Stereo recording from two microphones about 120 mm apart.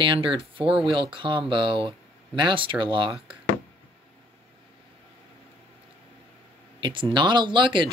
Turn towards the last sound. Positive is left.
turn(degrees=-40)  # may be behind; listen again after turning